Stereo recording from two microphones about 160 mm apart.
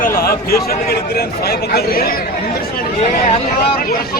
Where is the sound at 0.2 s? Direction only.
70° left (ahead or behind).